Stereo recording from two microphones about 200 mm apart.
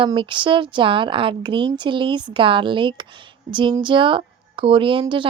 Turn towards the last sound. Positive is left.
turn(degrees=-25)  # may be behind; listen again after turning